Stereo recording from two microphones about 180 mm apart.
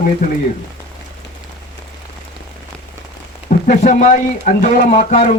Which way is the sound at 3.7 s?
40° left (ahead or behind).